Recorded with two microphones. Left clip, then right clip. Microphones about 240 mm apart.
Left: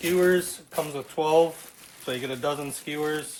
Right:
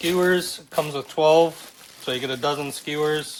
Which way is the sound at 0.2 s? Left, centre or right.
Right.